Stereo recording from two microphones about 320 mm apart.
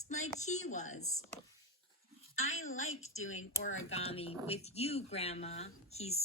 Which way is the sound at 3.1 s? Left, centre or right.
Left.